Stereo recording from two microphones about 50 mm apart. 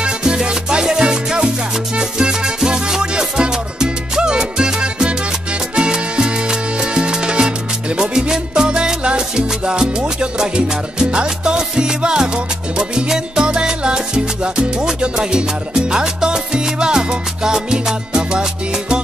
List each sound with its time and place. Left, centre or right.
0.0 s music: centre
5.8 s salsa music: centre
8.0 s music: centre
9.7 s salsa music: centre